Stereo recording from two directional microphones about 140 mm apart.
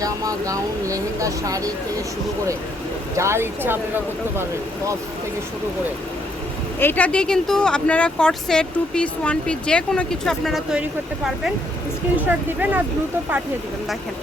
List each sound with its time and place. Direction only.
0.0 s speech: 25° right (ahead or behind)
3.2 s speech: 20° right (ahead or behind)
6.7 s speech: 15° left (ahead or behind); by 10.8 s 5° right (ahead or behind)
12.5 s speech: 10° right (ahead or behind)